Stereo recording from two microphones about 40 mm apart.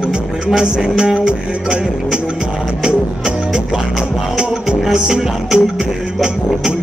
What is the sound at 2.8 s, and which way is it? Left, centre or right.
Speech, right.